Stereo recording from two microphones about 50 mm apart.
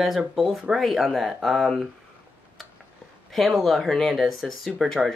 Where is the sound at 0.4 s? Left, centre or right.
Centre.